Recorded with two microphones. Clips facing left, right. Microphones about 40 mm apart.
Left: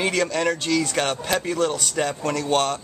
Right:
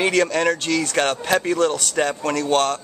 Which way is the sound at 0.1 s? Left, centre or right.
Centre.